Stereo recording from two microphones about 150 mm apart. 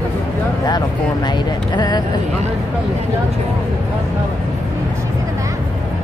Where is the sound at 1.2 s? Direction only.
30° left (ahead or behind).